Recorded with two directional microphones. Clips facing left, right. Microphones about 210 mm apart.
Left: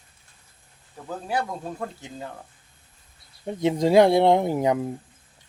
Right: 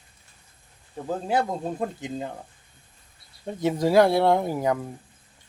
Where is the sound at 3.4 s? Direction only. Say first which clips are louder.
Left 2 dB; 15° left (ahead or behind).